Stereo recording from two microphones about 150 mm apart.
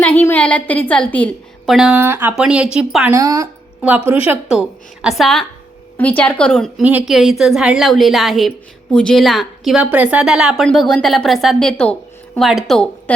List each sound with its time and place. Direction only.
0.3 s a woman's voice: 10° left (ahead or behind)
1.7 s a woman's voice: 5° right (ahead or behind)
3.2 s speech: 20° right (ahead or behind)
3.8 s a woman's voice: 10° right (ahead or behind)